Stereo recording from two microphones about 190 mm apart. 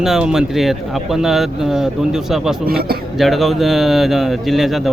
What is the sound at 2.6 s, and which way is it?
Speech, 55° right (ahead or behind).